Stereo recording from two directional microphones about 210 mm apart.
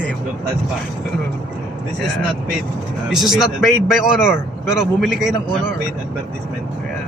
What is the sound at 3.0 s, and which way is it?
A man's voice, centre (ahead or behind).